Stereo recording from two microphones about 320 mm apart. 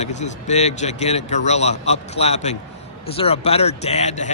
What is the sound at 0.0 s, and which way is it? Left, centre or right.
A man's voice, left.